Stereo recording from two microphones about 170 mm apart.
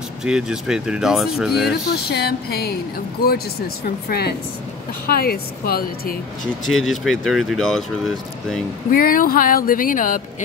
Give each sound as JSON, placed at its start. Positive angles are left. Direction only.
{"t": 0.2, "sound": "speech", "side_deg": -5}
{"t": 1.9, "sound": "speech", "side_deg": 65}
{"t": 6.6, "sound": "speech", "side_deg": 5}
{"t": 8.9, "sound": "speech", "side_deg": 55}